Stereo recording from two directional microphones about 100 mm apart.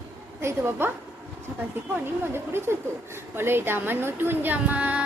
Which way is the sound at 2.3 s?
25° right (ahead or behind).